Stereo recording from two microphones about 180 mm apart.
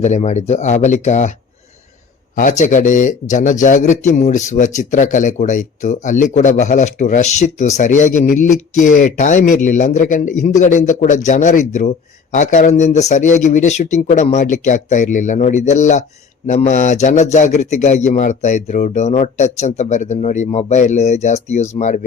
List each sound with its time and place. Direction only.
0.0 s speech: 40° left (ahead or behind)
2.3 s speech: 45° left (ahead or behind)